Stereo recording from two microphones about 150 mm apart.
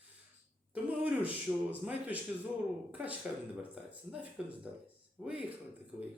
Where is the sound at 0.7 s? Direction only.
10° right (ahead or behind).